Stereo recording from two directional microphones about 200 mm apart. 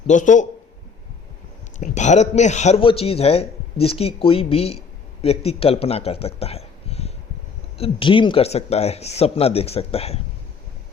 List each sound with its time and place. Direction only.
0.1 s a man's voice: 40° left (ahead or behind)
1.8 s speech: 35° left (ahead or behind)